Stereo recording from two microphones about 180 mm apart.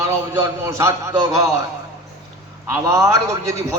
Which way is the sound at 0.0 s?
15° right (ahead or behind).